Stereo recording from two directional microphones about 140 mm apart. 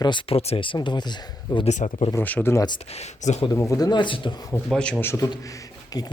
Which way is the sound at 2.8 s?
50° left (ahead or behind).